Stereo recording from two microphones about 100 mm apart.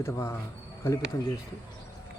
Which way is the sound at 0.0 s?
30° left (ahead or behind).